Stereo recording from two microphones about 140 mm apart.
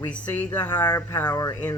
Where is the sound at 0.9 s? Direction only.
25° left (ahead or behind).